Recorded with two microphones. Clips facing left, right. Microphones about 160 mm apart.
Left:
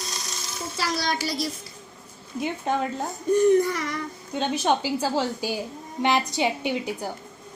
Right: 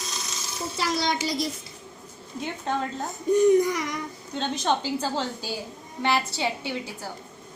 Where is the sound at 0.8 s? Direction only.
20° right (ahead or behind).